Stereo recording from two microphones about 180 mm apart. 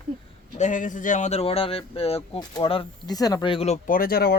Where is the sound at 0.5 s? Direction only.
45° left (ahead or behind).